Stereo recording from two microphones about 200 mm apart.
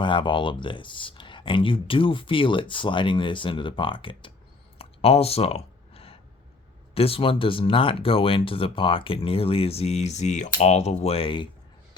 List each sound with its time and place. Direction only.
0.0 s speech: 25° left (ahead or behind)
4.8 s clicking: 30° left (ahead or behind)
6.9 s speech: 30° left (ahead or behind)